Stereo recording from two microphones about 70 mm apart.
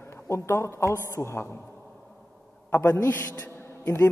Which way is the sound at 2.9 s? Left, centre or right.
Left.